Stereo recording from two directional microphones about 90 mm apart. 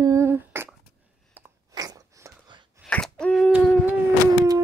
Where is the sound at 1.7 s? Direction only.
40° right (ahead or behind).